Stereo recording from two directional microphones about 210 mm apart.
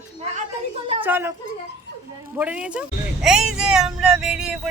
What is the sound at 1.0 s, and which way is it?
Speech, 10° right (ahead or behind).